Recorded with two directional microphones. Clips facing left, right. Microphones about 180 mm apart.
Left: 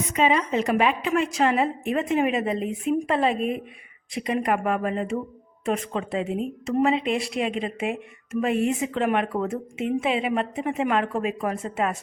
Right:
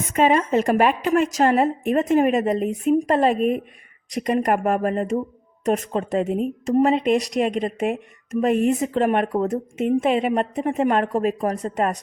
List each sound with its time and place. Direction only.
0.1 s a woman's voice: 50° right (ahead or behind)